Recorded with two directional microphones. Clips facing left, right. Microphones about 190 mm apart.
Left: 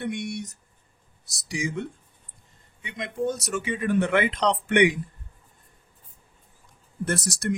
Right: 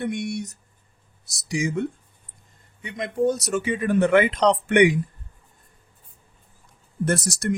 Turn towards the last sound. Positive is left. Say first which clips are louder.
# right 4 dB
turn(degrees=-45)  # may be behind; listen again after turning